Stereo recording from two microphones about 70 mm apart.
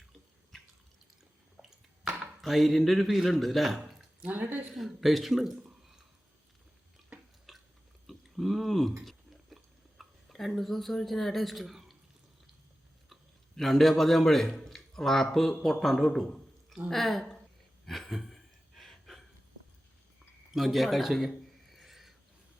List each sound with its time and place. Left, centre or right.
2.4 s speech: centre
4.2 s a woman's voice: right
4.7 s speech: centre
7.5 s chewing: centre
8.0 s a sound: centre
10.0 s speech: centre
13.6 s a man's voice: centre
17.8 s gasp: centre
20.5 s a sound: centre